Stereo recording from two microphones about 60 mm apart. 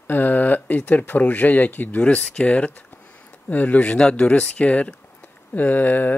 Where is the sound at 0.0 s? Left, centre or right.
Left.